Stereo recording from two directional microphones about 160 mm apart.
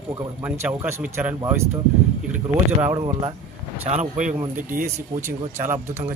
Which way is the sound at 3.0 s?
35° right (ahead or behind).